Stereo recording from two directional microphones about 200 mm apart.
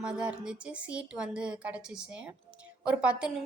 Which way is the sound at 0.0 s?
5° right (ahead or behind).